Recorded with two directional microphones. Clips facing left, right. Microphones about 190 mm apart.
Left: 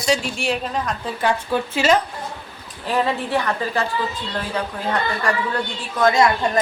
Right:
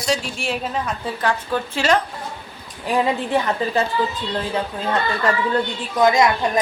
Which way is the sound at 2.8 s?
15° right (ahead or behind).